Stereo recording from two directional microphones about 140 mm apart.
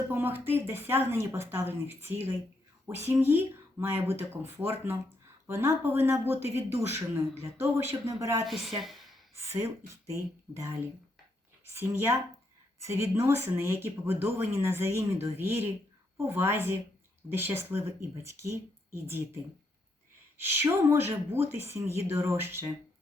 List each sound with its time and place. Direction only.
0.1 s speech: 15° right (ahead or behind)
8.4 s a woman's voice: centre (ahead or behind)
8.8 s a sound: centre (ahead or behind)
9.5 s speech: 20° right (ahead or behind)
20.4 s speech: 15° right (ahead or behind)